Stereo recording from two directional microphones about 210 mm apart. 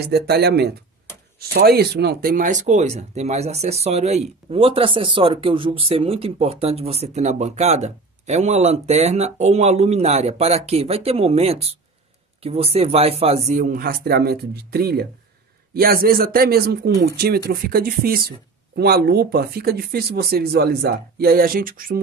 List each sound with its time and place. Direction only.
0.1 s speech: 50° right (ahead or behind); by 13.4 s 30° right (ahead or behind)
13.5 s speech: 40° right (ahead or behind)